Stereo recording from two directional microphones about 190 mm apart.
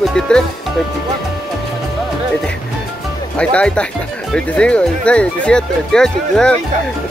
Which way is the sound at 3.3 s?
5° left (ahead or behind).